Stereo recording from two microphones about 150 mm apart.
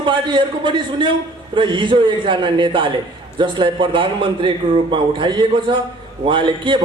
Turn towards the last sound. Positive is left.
turn(degrees=-35)  # may be behind; listen again after turning